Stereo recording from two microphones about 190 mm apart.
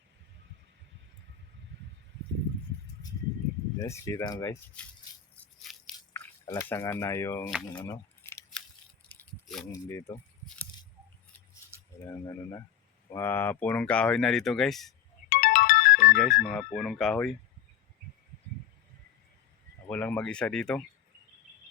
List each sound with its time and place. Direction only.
3.8 s speech: 15° left (ahead or behind)
5.4 s a sound: 5° left (ahead or behind)
6.4 s speech: 15° left (ahead or behind)
7.9 s keys jangling: 15° left (ahead or behind)
9.0 s a sound: 5° left (ahead or behind)
9.7 s speech: 15° left (ahead or behind)
12.2 s speech: 15° left (ahead or behind)
15.3 s ringtone: 45° left (ahead or behind)
16.1 s speech: centre (ahead or behind)
19.9 s speech: 10° left (ahead or behind)